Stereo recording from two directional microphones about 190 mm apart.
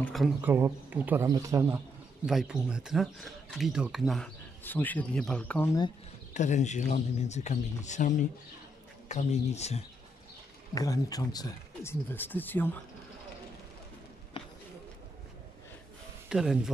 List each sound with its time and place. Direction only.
0.0 s speech: centre (ahead or behind)
0.5 s a man's voice: 10° right (ahead or behind)
2.2 s speech: centre (ahead or behind)
6.3 s speech: 40° left (ahead or behind)
10.7 s speech: 20° left (ahead or behind)
14.3 s a sound: 25° left (ahead or behind)
16.3 s speech: centre (ahead or behind)